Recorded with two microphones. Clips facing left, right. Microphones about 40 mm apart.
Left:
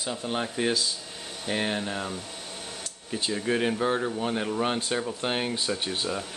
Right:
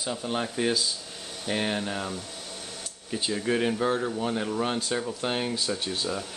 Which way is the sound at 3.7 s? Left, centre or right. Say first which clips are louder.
Even; centre.